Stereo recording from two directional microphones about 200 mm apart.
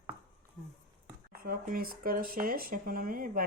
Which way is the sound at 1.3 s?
45° right (ahead or behind).